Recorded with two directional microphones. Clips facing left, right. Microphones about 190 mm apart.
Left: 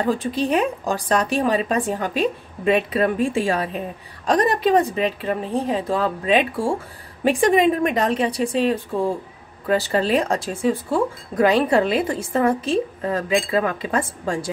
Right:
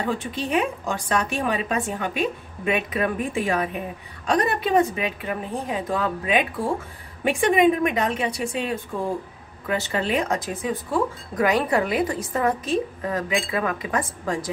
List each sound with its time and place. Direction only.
0.2 s a woman's voice: 35° left (ahead or behind)